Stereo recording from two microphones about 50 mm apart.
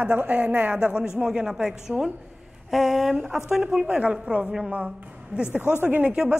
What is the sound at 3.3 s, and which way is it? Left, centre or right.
A woman's voice, centre.